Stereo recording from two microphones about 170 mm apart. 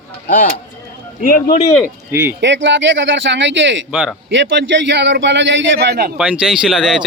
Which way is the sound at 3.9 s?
5° right (ahead or behind).